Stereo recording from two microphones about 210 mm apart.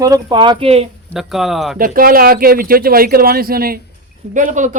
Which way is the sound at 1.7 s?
45° right (ahead or behind).